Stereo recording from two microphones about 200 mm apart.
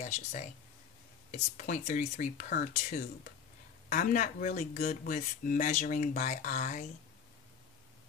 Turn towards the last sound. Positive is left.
turn(degrees=40)  # may be behind; listen again after turning